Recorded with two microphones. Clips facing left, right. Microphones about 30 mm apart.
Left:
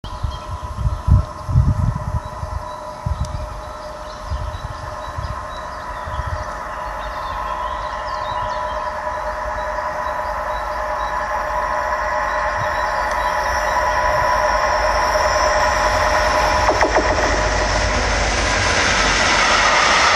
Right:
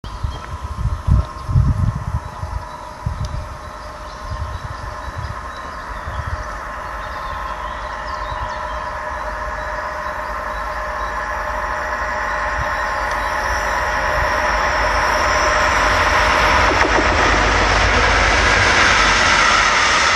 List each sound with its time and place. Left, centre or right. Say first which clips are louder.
7.2 s a sound: left 3 dB; centre
13.2 s music: left 1 dB; centre
14.0 s train: left 1 dB; centre